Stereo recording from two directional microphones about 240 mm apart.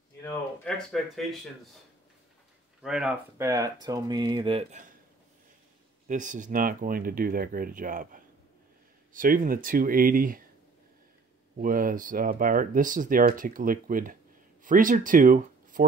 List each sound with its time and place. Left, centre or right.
0.2 s speech: centre
2.8 s speech: centre; by 4.8 s right
6.0 s speech: right
11.5 s speech: right